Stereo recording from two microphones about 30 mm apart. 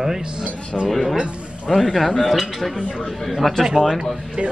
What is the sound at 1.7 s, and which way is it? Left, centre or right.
Speech, centre.